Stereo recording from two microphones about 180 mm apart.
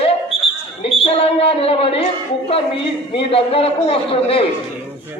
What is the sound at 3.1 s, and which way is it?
A man's voice, 30° left (ahead or behind).